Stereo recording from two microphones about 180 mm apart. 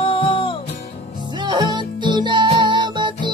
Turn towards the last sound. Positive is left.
turn(degrees=-25)  # may be behind; listen again after turning